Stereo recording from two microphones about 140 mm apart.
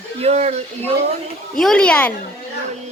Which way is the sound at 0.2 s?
50° right (ahead or behind).